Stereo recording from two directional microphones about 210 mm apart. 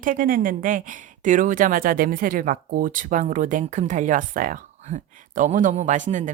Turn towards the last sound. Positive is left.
turn(degrees=-35)  # may be behind; listen again after turning